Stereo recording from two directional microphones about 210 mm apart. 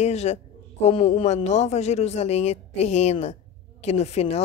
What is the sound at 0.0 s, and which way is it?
A woman's voice, 30° left (ahead or behind).